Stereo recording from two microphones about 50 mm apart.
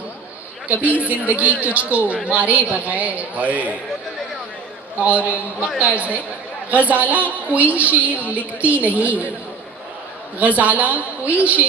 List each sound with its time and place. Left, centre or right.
0.7 s a woman's voice: right
4.9 s a woman's voice: right
10.3 s a woman's voice: right